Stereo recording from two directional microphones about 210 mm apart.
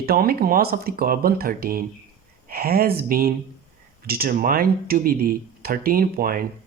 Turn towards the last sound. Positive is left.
turn(degrees=-45)  # may be behind; listen again after turning